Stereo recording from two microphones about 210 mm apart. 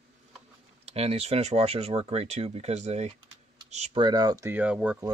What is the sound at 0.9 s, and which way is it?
Speech, 30° right (ahead or behind).